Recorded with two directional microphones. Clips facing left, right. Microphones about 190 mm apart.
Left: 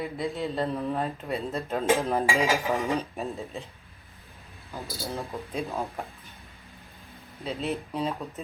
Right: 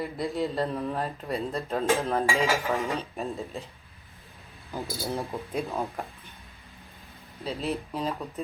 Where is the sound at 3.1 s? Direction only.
Centre (ahead or behind).